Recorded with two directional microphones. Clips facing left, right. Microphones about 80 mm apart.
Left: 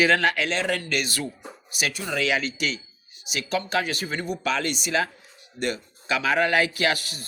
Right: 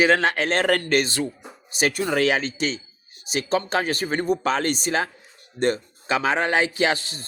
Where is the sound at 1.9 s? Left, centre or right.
Right.